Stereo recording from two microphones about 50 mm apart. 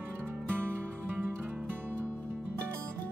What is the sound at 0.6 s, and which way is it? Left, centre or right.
Music, right.